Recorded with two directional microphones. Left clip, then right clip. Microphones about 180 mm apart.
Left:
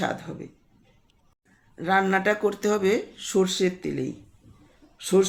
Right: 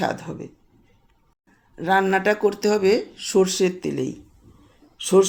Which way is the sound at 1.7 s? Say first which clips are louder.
Right 3 dB; 15° right (ahead or behind).